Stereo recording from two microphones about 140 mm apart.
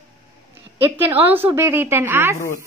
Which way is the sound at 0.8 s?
15° right (ahead or behind).